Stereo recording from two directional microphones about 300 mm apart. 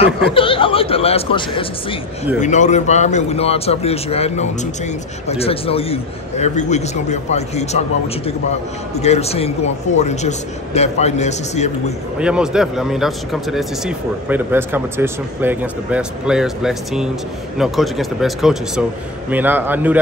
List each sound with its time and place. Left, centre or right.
0.0 s a man's voice: centre
12.2 s a man's voice: centre